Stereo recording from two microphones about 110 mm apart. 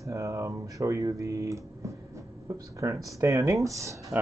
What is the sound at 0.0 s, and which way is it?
Speech, 30° right (ahead or behind).